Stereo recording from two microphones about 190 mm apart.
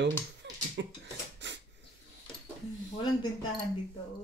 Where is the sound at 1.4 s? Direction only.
70° right (ahead or behind).